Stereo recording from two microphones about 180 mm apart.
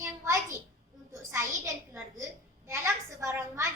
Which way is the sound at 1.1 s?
15° right (ahead or behind).